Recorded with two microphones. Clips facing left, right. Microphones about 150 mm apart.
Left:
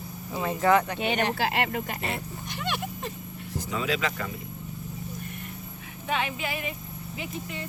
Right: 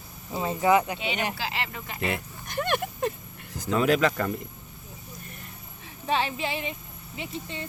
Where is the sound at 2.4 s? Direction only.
50° right (ahead or behind).